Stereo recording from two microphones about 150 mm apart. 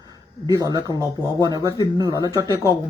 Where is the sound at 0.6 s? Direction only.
25° right (ahead or behind).